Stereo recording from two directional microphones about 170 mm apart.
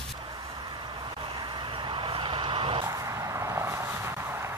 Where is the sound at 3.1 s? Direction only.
20° right (ahead or behind).